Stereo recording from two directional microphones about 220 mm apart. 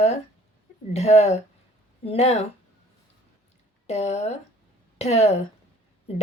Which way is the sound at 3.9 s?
30° left (ahead or behind).